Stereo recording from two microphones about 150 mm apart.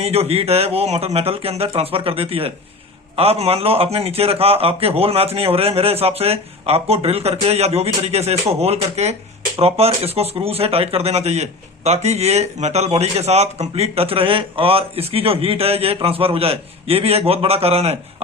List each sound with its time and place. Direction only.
0.0 s speech: 40° right (ahead or behind)